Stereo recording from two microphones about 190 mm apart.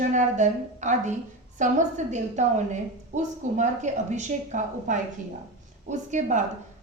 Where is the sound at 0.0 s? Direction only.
40° right (ahead or behind).